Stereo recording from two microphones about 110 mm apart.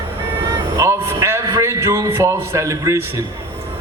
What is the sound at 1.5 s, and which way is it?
A man's voice, 25° right (ahead or behind).